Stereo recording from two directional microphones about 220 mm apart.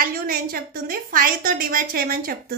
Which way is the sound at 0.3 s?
40° right (ahead or behind).